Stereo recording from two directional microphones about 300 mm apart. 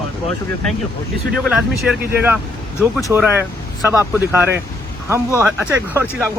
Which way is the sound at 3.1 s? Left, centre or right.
Centre.